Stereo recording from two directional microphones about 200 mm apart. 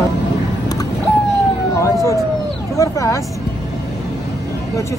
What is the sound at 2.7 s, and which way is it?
Speech, 15° left (ahead or behind).